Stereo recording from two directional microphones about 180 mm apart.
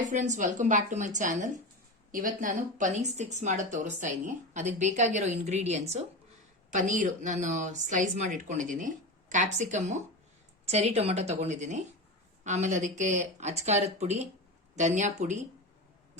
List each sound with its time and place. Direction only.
0.0 s a woman's voice: 40° right (ahead or behind)